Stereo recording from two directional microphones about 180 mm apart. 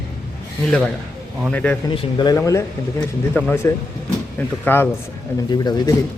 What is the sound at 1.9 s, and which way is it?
Speech, 25° left (ahead or behind).